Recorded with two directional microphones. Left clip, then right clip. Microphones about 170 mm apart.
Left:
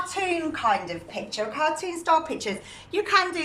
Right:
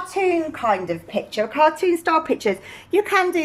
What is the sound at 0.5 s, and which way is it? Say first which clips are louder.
A woman's voice: right 3 dB; 50° right (ahead or behind).